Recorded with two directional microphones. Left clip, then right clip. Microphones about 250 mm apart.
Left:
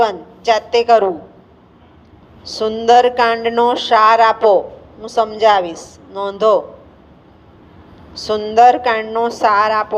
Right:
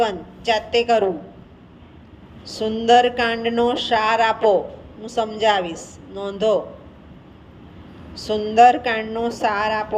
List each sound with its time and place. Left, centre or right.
0.0 s speech: left
2.5 s speech: left
8.1 s speech: left